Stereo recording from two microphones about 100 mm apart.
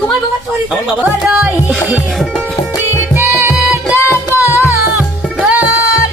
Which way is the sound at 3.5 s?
10° right (ahead or behind).